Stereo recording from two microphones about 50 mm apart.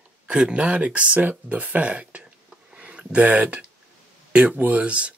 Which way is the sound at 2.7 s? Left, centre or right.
Right.